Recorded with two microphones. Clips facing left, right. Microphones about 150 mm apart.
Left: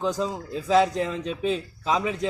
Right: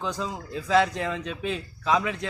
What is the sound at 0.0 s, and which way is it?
A man's voice, 40° left (ahead or behind).